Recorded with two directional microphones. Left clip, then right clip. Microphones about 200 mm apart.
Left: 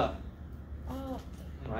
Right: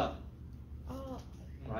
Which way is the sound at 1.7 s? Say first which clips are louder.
Left 3 dB; 10° right (ahead or behind).